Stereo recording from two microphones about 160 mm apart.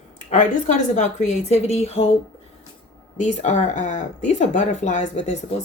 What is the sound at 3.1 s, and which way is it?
Speech, 45° left (ahead or behind).